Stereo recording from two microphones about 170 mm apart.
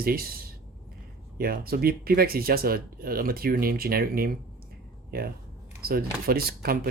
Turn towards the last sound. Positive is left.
turn(degrees=-65)  # may be behind; listen again after turning